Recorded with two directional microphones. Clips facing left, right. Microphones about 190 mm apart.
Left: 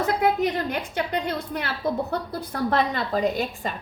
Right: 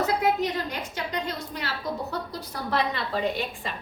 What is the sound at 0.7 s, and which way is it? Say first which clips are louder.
A woman's voice: left 5 dB; 55° left (ahead or behind).